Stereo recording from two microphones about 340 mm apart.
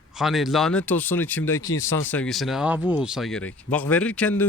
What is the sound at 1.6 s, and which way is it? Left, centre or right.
Speech, left.